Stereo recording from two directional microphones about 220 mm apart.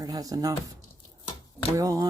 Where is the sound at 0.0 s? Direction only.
15° right (ahead or behind).